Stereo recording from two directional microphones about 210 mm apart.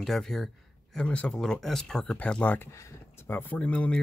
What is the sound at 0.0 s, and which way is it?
Speech, centre (ahead or behind).